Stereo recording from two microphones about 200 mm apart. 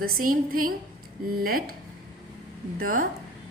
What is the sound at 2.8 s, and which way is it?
Speech, 45° right (ahead or behind).